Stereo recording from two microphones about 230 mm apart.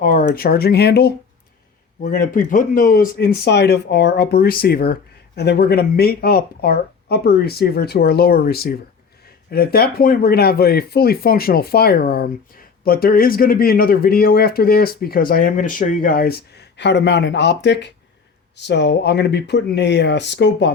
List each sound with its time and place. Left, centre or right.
0.0 s speech: left